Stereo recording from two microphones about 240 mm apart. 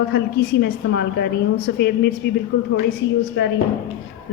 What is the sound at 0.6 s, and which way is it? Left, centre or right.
A woman's voice, left.